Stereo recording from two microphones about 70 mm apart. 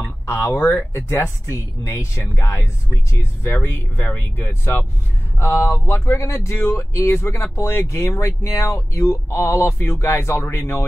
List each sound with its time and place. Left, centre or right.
0.0 s speech: left
3.5 s speech: left